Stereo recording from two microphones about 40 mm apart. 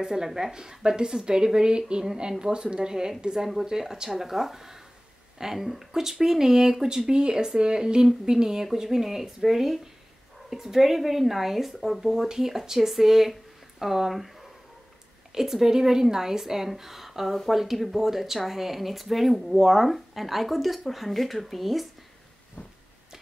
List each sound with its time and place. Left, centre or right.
0.0 s speech: centre
15.3 s speech: centre
22.6 s a sound: left